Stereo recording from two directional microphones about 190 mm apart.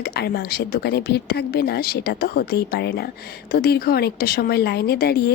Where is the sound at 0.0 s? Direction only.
55° left (ahead or behind).